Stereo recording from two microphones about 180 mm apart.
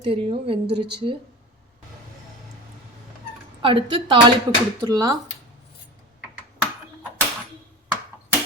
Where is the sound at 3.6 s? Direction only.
25° right (ahead or behind).